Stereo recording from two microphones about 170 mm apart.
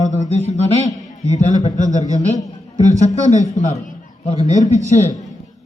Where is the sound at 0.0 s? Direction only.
45° left (ahead or behind).